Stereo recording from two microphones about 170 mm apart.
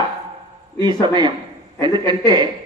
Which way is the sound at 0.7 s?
25° right (ahead or behind).